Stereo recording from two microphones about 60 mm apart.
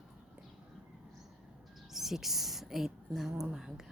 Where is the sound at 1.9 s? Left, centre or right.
Centre.